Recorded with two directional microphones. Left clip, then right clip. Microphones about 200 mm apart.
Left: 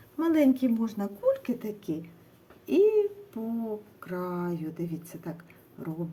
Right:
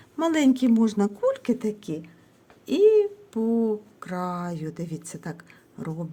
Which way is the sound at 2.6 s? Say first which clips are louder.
Right 4 dB; 45° right (ahead or behind).